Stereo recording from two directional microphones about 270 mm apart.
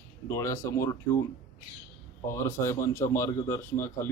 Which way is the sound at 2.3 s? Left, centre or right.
Centre.